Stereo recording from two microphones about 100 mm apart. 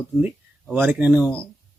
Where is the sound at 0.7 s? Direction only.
20° right (ahead or behind).